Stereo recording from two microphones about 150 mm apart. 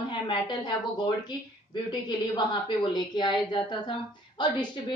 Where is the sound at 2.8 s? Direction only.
30° left (ahead or behind).